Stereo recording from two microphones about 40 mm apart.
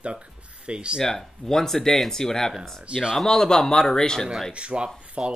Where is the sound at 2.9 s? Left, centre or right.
Centre.